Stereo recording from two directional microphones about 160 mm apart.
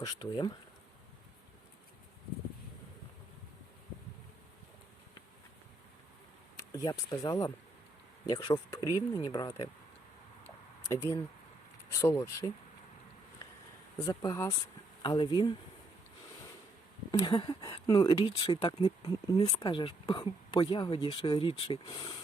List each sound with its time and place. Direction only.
0.0 s speech: 30° left (ahead or behind)
6.6 s speech: 20° left (ahead or behind)
10.4 s a sound: 15° left (ahead or behind)
11.9 s speech: 15° left (ahead or behind)
14.0 s speech: 20° left (ahead or behind)
17.1 s speech: 30° left (ahead or behind)